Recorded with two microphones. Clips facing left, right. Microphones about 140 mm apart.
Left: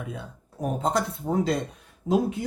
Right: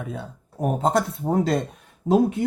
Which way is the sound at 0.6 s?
50° right (ahead or behind).